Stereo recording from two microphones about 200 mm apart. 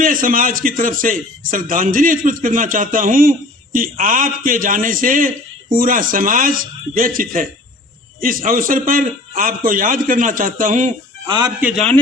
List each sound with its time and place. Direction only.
0.0 s a man's voice: 45° right (ahead or behind)
11.3 s speech: 20° right (ahead or behind)
11.6 s a man's voice: 5° left (ahead or behind)